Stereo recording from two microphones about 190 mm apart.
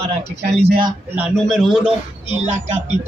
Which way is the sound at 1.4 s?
Centre (ahead or behind).